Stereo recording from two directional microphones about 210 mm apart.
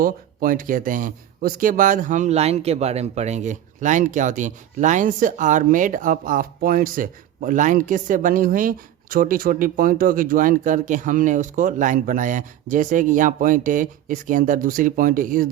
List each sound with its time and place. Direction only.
0.0 s speech: 40° right (ahead or behind)